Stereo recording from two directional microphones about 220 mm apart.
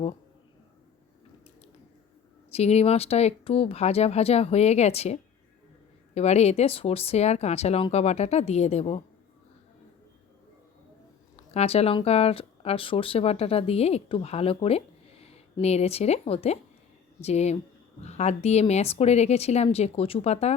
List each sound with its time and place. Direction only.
2.5 s speech: 30° left (ahead or behind)
11.5 s speech: 30° left (ahead or behind)